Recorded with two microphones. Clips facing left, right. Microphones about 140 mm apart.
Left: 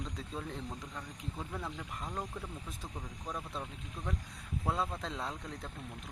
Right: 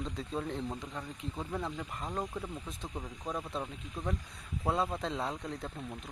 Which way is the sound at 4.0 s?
25° right (ahead or behind).